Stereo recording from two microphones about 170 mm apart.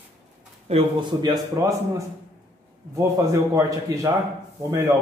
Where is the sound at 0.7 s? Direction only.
35° right (ahead or behind).